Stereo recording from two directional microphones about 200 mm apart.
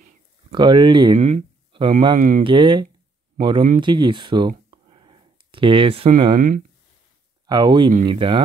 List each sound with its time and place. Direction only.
0.5 s speech: 25° right (ahead or behind)
2.1 s speech: 40° right (ahead or behind)
2.4 s speech: 25° right (ahead or behind)
7.4 s speech: 20° right (ahead or behind)